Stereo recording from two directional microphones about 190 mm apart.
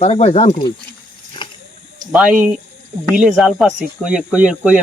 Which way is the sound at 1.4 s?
25° left (ahead or behind).